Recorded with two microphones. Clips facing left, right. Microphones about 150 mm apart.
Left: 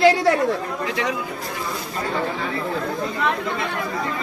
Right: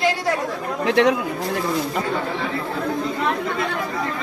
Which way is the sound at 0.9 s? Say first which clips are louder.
Right 10 dB; 80° right.